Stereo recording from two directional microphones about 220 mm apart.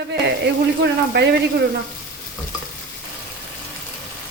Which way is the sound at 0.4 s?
50° right (ahead or behind).